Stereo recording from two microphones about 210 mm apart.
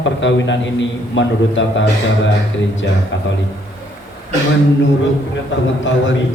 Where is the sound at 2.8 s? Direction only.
60° left (ahead or behind).